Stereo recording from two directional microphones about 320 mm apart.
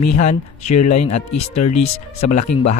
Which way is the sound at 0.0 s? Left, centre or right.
Left.